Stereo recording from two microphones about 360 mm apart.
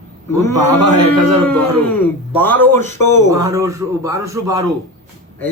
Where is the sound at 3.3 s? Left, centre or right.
Centre.